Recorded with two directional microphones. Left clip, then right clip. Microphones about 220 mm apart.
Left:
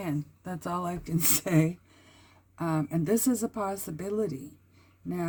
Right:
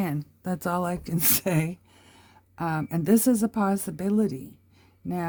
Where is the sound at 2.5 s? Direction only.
50° right (ahead or behind).